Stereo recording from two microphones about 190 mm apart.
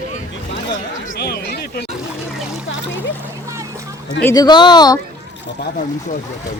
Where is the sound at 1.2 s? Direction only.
60° left (ahead or behind).